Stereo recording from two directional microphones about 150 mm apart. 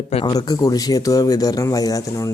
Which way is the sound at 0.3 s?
25° left (ahead or behind).